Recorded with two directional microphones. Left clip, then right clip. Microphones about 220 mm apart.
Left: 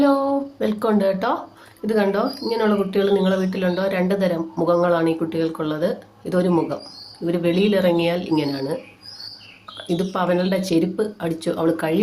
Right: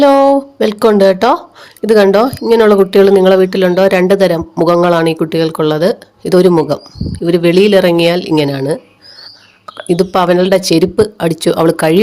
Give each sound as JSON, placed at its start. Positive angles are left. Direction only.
{"t": 0.0, "sound": "speech", "side_deg": -45}